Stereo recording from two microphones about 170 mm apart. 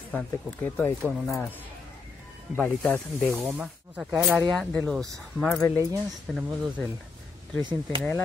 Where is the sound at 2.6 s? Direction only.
10° left (ahead or behind).